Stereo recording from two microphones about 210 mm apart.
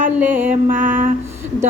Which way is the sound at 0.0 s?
10° right (ahead or behind).